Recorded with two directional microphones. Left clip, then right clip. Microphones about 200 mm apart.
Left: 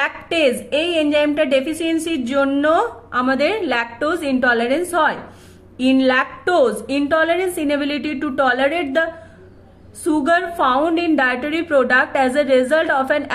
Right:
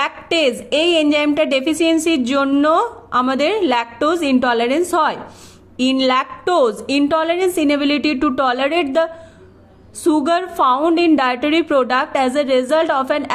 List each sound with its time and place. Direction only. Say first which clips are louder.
0.0 s a woman's voice: right 1 dB; 40° right (ahead or behind)